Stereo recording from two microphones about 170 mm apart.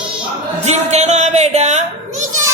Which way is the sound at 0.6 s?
40° right (ahead or behind).